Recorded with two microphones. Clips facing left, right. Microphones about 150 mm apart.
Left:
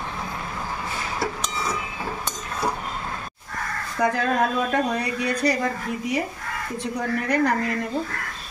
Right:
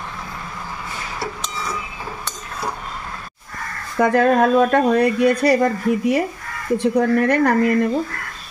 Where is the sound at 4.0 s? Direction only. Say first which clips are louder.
Right 7 dB; 60° right (ahead or behind).